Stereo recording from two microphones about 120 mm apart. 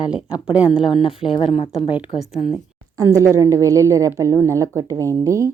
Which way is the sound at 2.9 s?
25° right (ahead or behind).